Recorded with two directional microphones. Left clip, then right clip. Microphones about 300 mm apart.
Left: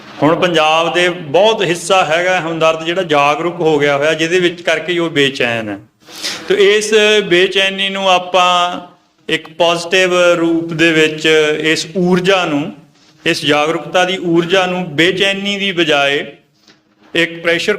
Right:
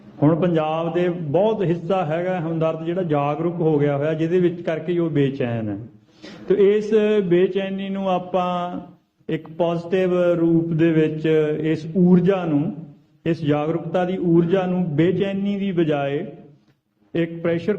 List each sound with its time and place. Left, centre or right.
0.2 s a man's voice: centre
1.3 s a man's voice: left
1.5 s a man's voice: centre
9.6 s a sound: centre
12.0 s a man's voice: centre